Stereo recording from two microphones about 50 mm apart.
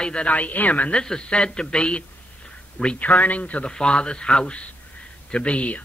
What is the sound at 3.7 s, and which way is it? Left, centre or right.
A man's voice, centre.